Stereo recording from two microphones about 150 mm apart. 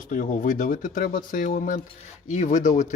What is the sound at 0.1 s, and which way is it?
Speech, 60° left (ahead or behind).